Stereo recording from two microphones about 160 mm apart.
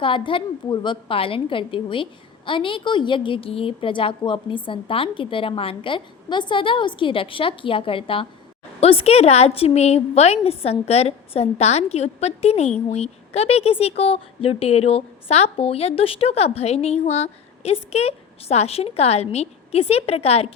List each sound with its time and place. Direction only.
0.0 s a woman's voice: 30° left (ahead or behind)